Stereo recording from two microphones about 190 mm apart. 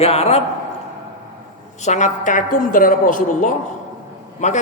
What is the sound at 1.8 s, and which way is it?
A woman's voice, 40° left (ahead or behind).